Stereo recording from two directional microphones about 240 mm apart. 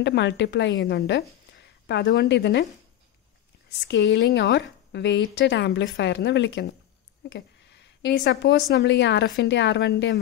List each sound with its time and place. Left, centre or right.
0.0 s a woman's voice: left
3.8 s speech: left